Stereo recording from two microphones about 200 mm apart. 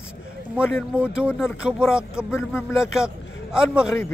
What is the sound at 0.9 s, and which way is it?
A man's voice, 5° right (ahead or behind).